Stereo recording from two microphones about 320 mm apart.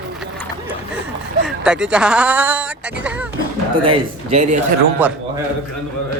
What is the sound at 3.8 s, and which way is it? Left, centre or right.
Speech, centre.